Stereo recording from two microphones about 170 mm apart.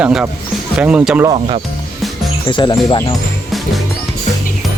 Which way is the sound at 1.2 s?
35° right (ahead or behind).